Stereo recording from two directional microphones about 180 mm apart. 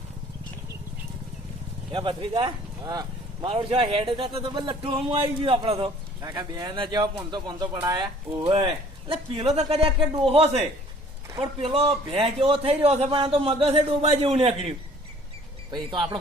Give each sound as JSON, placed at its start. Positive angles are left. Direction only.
{"t": 1.9, "sound": "speech", "side_deg": -30}
{"t": 8.4, "sound": "a man's voice", "side_deg": -30}
{"t": 15.7, "sound": "speech", "side_deg": -25}